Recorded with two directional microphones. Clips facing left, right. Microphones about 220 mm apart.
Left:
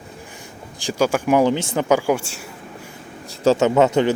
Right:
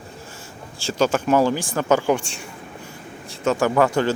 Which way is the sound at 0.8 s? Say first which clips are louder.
Left 1 dB; 15° left (ahead or behind).